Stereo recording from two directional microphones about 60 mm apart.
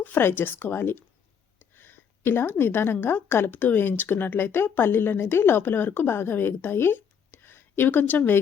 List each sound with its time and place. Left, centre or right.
0.0 s a woman's voice: left
7.4 s a sound: left
7.9 s a woman's voice: left